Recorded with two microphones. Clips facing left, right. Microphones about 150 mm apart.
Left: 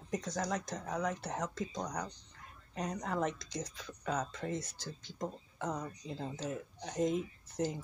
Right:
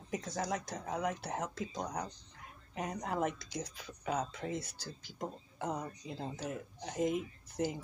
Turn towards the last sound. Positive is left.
turn(degrees=-10)  # may be behind; listen again after turning